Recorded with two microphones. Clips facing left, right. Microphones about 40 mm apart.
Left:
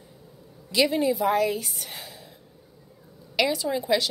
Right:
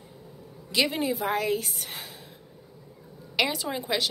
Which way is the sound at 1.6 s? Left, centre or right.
Right.